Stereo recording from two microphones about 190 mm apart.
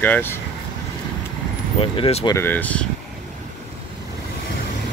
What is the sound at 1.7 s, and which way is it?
Speech, 30° left (ahead or behind).